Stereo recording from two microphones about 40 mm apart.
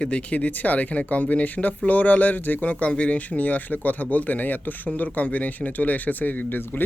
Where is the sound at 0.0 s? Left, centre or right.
Left.